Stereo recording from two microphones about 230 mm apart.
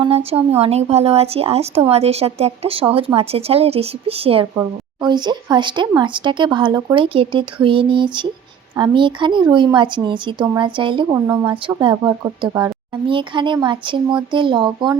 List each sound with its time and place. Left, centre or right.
0.3 s a woman's voice: right